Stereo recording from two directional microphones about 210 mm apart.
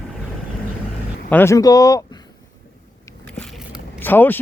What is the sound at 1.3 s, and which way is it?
Speech, 10° left (ahead or behind).